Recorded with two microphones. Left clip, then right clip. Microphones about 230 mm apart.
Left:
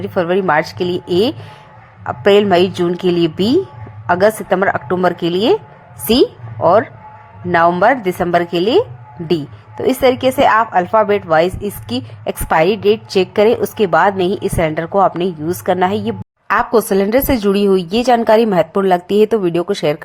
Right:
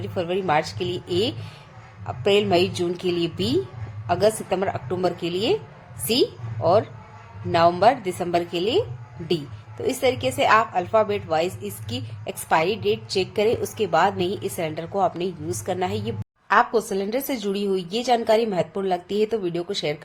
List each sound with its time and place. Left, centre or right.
0.0 s a woman's voice: left